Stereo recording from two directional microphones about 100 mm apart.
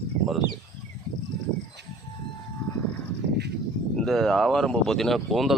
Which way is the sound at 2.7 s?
30° left (ahead or behind).